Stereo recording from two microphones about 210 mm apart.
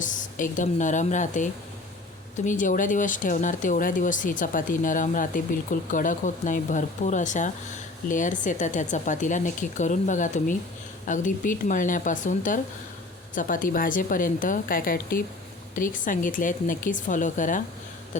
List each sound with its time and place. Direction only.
0.0 s speech: 40° left (ahead or behind)